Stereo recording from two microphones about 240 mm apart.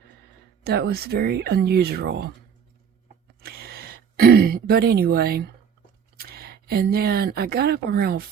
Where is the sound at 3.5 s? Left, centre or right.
Right.